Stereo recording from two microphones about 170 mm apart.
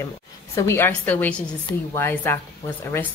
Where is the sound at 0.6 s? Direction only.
15° left (ahead or behind).